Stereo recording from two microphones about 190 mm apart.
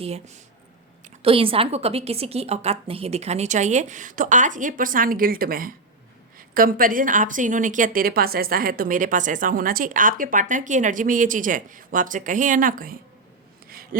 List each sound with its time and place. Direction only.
1.0 s a woman's voice: 30° right (ahead or behind); by 13.0 s 50° right (ahead or behind)